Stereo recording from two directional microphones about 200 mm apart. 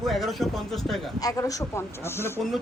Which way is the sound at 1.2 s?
15° left (ahead or behind).